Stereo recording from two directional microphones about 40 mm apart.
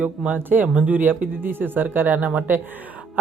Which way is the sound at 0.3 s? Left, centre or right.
Right.